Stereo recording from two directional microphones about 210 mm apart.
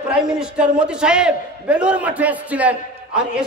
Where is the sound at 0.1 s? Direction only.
5° right (ahead or behind).